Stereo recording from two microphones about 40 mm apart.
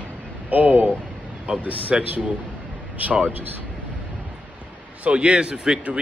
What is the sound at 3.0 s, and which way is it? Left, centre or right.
Speech, right.